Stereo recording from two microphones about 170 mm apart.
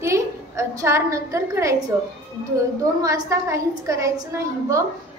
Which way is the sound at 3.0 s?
20° right (ahead or behind).